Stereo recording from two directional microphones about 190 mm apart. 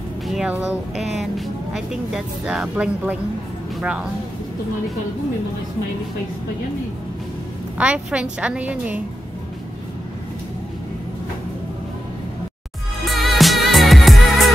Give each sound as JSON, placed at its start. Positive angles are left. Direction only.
{"t": 0.3, "sound": "speech", "side_deg": -5}
{"t": 7.7, "sound": "a woman's voice", "side_deg": -5}
{"t": 13.0, "sound": "music", "side_deg": 0}